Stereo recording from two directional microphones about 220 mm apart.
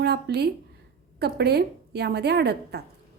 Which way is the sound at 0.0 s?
50° right (ahead or behind).